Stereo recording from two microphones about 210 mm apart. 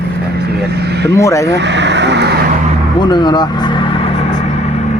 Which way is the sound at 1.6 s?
55° right (ahead or behind).